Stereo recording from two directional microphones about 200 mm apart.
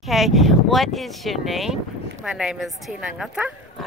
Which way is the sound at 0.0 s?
Centre (ahead or behind).